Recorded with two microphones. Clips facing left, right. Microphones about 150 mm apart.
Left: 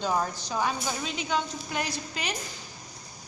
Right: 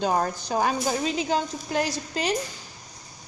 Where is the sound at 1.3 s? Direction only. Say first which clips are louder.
Right 4 dB; 40° right (ahead or behind).